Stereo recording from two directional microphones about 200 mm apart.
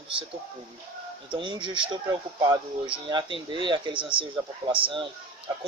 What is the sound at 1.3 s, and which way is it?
Speech, 25° right (ahead or behind).